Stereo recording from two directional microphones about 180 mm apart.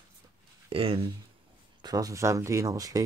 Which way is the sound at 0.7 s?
30° right (ahead or behind).